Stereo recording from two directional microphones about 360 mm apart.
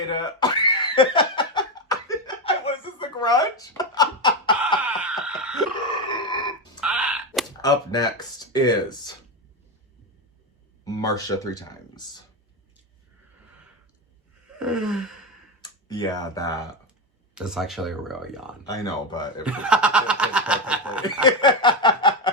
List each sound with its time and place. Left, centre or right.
0.1 s laughter: centre
4.8 s a sound: centre
6.1 s grunt: centre
6.8 s a sound: centre
7.6 s snicker: centre
10.8 s a sound: centre
11.7 s speech: centre
14.6 s gasp: centre
15.9 s snicker: centre
17.3 s speech: centre
18.6 s snicker: centre
19.4 s speech: centre
21.2 s snicker: centre